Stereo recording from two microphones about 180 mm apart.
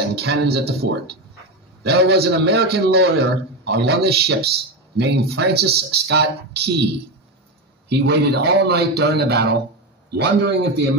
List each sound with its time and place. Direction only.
0.1 s a man's voice: 65° right (ahead or behind)
7.9 s a man's voice: 70° right (ahead or behind)